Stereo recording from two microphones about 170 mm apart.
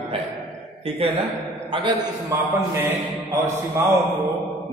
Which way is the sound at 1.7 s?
30° right (ahead or behind).